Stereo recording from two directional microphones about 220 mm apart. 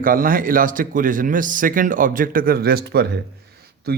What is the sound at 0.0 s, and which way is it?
Speech, 40° right (ahead or behind).